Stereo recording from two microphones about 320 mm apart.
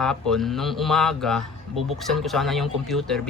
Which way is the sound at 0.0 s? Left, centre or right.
Centre.